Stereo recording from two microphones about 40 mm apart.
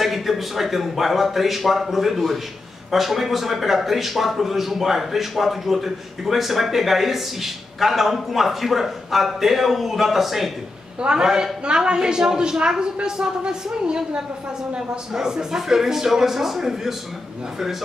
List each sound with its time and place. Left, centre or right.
0.0 s speech: centre
11.0 s a woman's voice: right
11.2 s speech: centre
11.6 s a woman's voice: right